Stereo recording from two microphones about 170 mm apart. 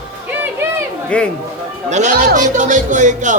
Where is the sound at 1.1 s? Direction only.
5° left (ahead or behind).